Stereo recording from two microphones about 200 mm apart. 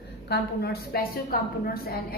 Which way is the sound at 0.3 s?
55° left (ahead or behind).